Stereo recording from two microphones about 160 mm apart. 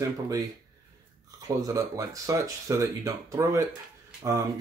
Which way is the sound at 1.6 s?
20° right (ahead or behind).